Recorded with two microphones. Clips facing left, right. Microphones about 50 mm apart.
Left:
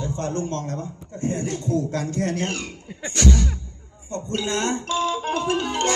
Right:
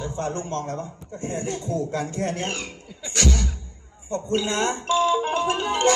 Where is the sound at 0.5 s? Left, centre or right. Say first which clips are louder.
Even; right.